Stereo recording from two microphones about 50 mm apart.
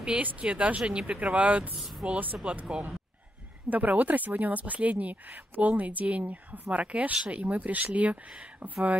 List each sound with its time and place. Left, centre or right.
0.0 s speech: right
3.7 s speech: right